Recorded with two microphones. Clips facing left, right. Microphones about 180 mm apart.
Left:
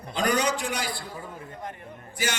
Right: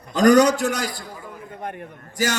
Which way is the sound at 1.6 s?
65° right (ahead or behind).